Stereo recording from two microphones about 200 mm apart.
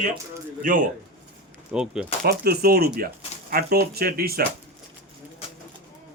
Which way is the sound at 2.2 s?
50° right (ahead or behind).